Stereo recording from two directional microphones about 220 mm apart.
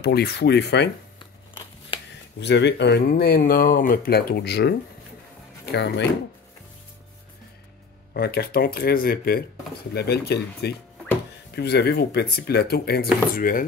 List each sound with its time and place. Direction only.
0.0 s speech: 45° left (ahead or behind)
2.4 s speech: 50° left (ahead or behind)
8.1 s speech: 45° left (ahead or behind)